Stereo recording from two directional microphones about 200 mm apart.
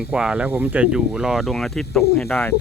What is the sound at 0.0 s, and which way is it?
Speech, 5° right (ahead or behind).